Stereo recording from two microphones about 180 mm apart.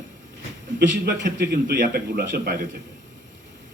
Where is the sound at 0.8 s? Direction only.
50° right (ahead or behind).